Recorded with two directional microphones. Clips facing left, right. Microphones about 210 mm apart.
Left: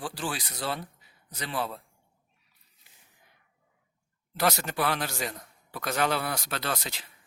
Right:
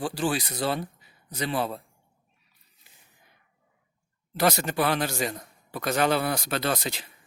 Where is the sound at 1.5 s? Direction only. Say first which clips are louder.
Right 3 dB; 25° right (ahead or behind).